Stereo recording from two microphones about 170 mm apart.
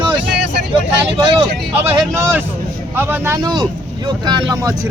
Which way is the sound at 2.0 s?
15° right (ahead or behind).